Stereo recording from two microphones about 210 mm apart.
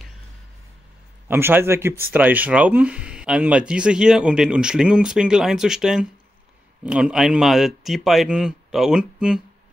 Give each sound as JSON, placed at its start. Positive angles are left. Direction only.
{"t": 1.3, "sound": "speech", "side_deg": -10}